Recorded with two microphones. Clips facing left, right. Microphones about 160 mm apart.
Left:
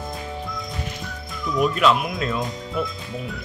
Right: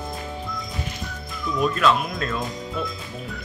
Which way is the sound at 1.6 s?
15° left (ahead or behind).